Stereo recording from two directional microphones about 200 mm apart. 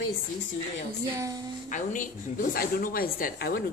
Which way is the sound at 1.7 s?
40° left (ahead or behind).